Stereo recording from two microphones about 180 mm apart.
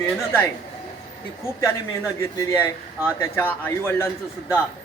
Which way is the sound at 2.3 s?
15° left (ahead or behind).